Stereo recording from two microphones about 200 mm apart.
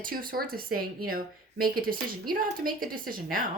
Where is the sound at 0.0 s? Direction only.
45° right (ahead or behind).